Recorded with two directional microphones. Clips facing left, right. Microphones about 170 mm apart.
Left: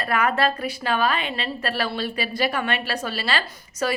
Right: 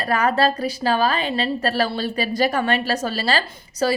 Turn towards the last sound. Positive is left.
turn(degrees=-35)  # may be behind; listen again after turning